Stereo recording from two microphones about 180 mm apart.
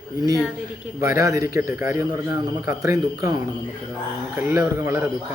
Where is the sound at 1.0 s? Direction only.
15° right (ahead or behind).